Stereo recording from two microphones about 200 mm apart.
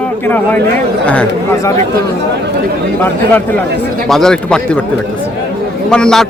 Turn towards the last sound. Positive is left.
turn(degrees=5)  # may be behind; listen again after turning